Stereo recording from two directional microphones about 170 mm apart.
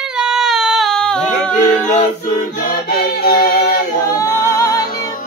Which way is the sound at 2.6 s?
60° left (ahead or behind).